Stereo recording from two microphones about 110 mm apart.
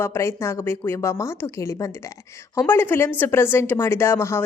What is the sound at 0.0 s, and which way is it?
Speech, 25° left (ahead or behind).